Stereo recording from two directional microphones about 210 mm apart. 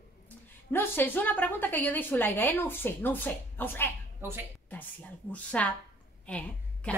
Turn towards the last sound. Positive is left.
turn(degrees=5)  # may be behind; listen again after turning